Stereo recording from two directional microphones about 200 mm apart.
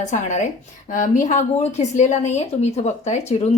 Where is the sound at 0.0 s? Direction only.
35° left (ahead or behind).